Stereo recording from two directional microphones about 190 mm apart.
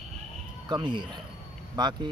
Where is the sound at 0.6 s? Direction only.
25° right (ahead or behind).